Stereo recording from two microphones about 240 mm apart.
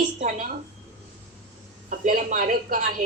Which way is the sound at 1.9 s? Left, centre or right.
Right.